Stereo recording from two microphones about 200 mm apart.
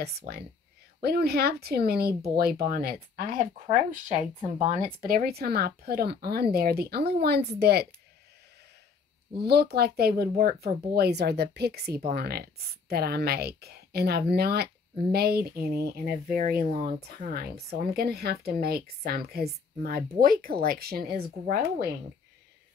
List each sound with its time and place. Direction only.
0.0 s speech: 50° right (ahead or behind)
3.6 s speech: 35° right (ahead or behind); by 7.9 s 55° right (ahead or behind)
9.4 s speech: 50° right (ahead or behind)